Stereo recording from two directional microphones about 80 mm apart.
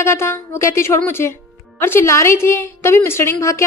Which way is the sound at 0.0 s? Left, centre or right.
Left.